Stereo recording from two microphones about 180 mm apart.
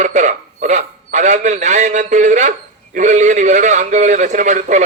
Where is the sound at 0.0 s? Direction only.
40° right (ahead or behind).